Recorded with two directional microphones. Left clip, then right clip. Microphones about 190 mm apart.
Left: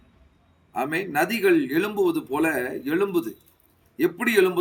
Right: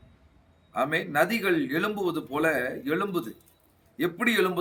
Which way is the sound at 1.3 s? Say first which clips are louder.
Left 5 dB; 15° right (ahead or behind).